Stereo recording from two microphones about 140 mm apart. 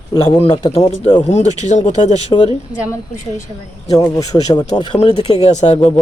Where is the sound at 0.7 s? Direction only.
50° left (ahead or behind).